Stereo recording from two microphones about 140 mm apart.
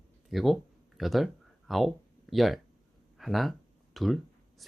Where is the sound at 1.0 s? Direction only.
Centre (ahead or behind).